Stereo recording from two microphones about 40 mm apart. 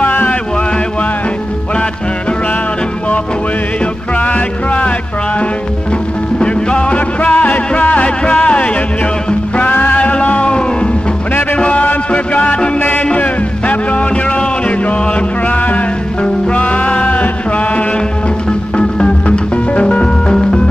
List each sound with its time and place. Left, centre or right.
0.0 s music: left
4.2 s music: left
6.4 s music: left
9.6 s music: left
12.7 s music: left
13.0 s music: left
20.2 s music: centre